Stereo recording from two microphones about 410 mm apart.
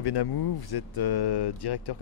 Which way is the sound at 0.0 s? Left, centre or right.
Left.